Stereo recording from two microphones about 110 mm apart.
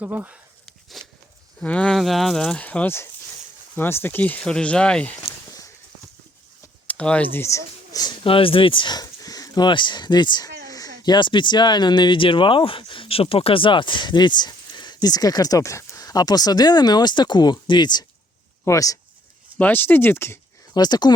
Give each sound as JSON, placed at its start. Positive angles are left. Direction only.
{"t": 0.0, "sound": "speech", "side_deg": -15}
{"t": 0.9, "sound": "speech", "side_deg": 0}
{"t": 6.8, "sound": "speech", "side_deg": 10}
{"t": 8.2, "sound": "speech", "side_deg": 55}
{"t": 18.6, "sound": "speech", "side_deg": 30}
{"t": 19.5, "sound": "speech", "side_deg": 15}
{"t": 20.7, "sound": "speech", "side_deg": 40}